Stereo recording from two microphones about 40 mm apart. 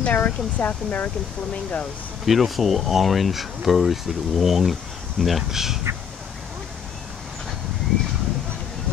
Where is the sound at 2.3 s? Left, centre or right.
Centre.